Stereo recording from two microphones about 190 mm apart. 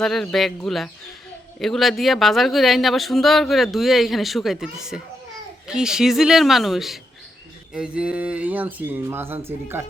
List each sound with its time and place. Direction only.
0.0 s speech: centre (ahead or behind)